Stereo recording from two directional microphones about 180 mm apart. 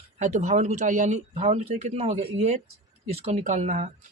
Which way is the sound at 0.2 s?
40° right (ahead or behind).